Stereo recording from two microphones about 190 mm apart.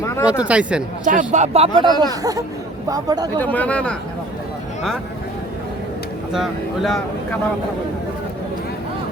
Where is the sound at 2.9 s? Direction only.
20° right (ahead or behind).